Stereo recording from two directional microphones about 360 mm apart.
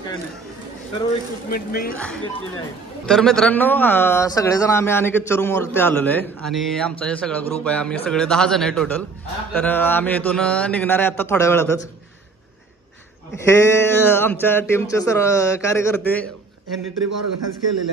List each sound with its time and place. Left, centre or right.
1.5 s speech: left
3.1 s a man's voice: centre
13.5 s speech: centre
16.6 s a man's voice: right